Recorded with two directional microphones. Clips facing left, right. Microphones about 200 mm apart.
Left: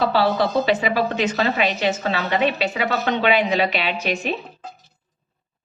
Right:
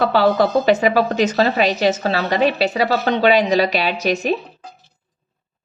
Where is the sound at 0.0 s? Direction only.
50° right (ahead or behind).